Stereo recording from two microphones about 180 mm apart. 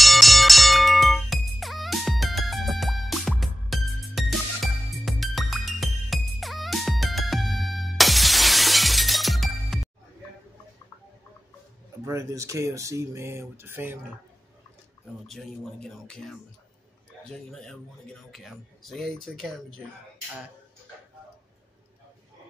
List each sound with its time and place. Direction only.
0.0 s music: centre (ahead or behind)
12.0 s speech: 15° right (ahead or behind)
15.2 s speech: centre (ahead or behind)